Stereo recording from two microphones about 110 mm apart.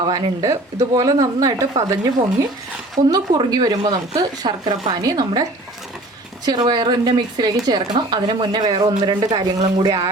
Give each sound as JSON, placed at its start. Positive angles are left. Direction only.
{"t": 0.1, "sound": "speech", "side_deg": -30}